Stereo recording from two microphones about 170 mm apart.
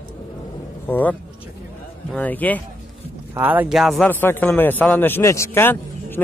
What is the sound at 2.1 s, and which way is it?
Speech, 10° left (ahead or behind).